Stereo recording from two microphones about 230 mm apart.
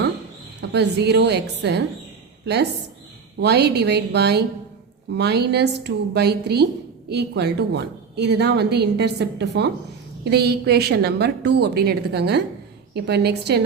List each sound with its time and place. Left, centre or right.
0.6 s a woman's voice: right
3.4 s a woman's voice: right